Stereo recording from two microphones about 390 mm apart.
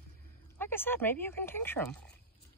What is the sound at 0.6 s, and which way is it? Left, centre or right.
Speech, centre.